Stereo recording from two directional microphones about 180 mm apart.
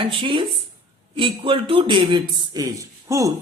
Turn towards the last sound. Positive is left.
turn(degrees=-20)  # may be behind; listen again after turning